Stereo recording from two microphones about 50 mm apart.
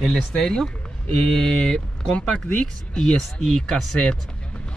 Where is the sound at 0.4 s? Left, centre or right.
Centre.